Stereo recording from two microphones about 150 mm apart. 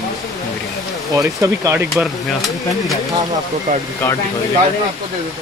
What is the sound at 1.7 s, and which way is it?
Speech, 5° right (ahead or behind).